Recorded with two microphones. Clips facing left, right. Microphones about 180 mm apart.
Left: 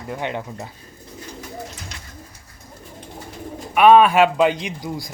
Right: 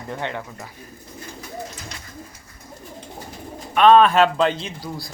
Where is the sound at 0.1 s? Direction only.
15° left (ahead or behind).